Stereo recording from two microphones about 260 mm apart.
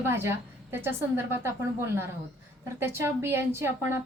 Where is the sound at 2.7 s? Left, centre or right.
Centre.